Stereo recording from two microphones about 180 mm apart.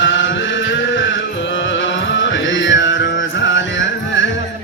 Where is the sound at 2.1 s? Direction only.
90° left.